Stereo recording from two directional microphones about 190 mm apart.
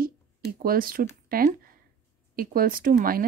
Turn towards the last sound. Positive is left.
turn(degrees=-50)  # may be behind; listen again after turning